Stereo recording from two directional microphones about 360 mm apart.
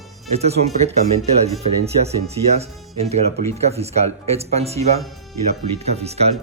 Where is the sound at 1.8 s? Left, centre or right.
Centre.